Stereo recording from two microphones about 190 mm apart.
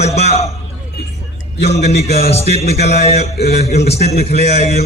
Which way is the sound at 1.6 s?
35° left (ahead or behind).